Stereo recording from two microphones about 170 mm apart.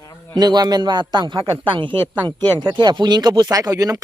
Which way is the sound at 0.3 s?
25° right (ahead or behind).